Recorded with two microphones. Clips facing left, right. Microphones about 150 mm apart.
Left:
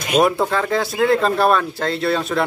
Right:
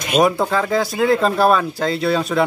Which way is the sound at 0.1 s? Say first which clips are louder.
Even; centre (ahead or behind).